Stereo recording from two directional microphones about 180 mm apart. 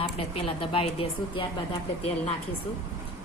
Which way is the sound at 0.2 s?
30° left (ahead or behind).